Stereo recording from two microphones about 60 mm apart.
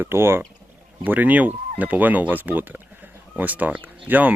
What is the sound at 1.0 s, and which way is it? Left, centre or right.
Speech, right.